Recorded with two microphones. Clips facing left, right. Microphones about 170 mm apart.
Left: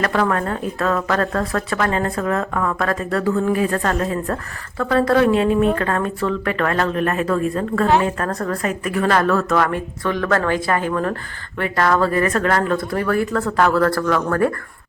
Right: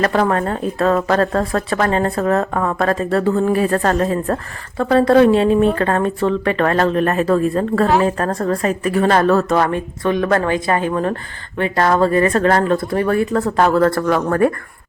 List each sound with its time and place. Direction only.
0.0 s a woman's voice: 35° right (ahead or behind)